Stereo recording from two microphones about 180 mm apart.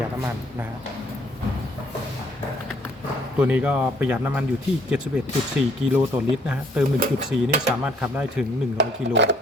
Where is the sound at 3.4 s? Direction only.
10° right (ahead or behind).